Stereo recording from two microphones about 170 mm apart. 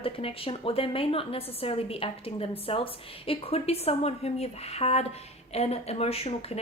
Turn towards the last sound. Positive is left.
turn(degrees=35)  # may be behind; listen again after turning